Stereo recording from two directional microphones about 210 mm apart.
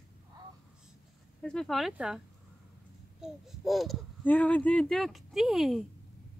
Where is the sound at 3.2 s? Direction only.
Centre (ahead or behind).